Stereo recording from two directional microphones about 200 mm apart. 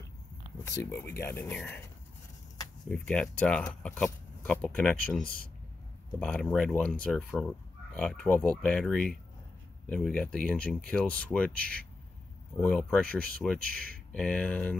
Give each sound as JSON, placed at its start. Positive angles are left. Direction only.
{"t": 1.1, "sound": "speech", "side_deg": 10}
{"t": 2.9, "sound": "speech", "side_deg": 5}
{"t": 5.2, "sound": "speech", "side_deg": 50}
{"t": 6.1, "sound": "speech", "side_deg": 5}